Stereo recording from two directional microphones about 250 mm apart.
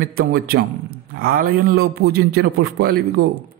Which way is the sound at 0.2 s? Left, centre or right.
Right.